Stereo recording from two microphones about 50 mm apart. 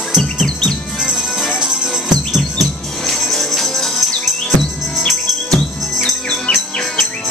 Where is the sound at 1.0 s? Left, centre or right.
Centre.